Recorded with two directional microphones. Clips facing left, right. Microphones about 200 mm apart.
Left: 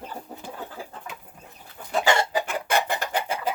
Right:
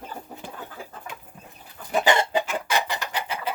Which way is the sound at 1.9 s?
20° right (ahead or behind).